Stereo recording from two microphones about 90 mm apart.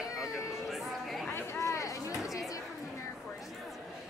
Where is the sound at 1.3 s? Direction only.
30° left (ahead or behind).